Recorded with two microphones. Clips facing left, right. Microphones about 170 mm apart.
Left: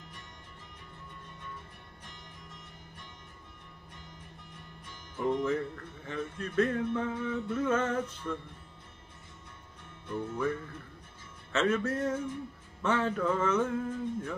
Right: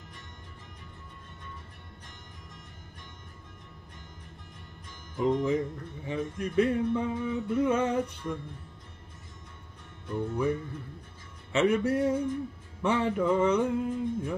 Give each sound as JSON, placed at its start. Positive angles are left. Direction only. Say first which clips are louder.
{"t": 5.1, "sound": "music", "louder": "right 3 dB", "side_deg": -15}
{"t": 10.0, "sound": "music", "louder": "right 3 dB", "side_deg": -15}